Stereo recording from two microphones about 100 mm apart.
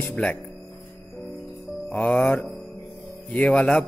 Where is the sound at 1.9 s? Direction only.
15° left (ahead or behind).